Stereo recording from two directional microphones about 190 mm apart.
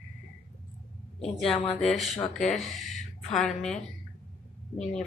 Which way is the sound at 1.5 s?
30° left (ahead or behind).